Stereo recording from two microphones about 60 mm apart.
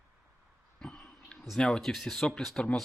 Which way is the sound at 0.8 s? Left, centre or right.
Centre.